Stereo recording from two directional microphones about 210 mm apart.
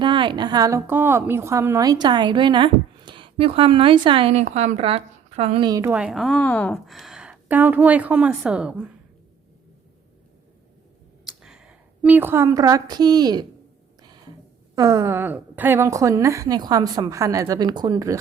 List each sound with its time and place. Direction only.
0.0 s a woman's voice: 25° right (ahead or behind)
5.9 s a woman's voice: 5° right (ahead or behind)
11.3 s a woman's voice: 5° right (ahead or behind); by 13.4 s 20° right (ahead or behind)
14.8 s a woman's voice: 15° right (ahead or behind)